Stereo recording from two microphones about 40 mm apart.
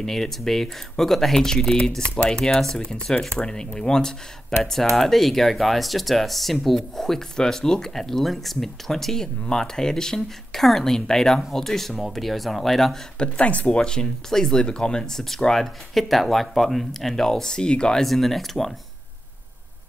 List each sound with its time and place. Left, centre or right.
0.0 s speech: centre
13.2 s speech: left
13.7 s speech: centre
18.0 s speech: centre